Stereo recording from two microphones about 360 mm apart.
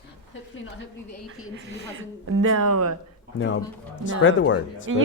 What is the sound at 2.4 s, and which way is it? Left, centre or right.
Speech, right.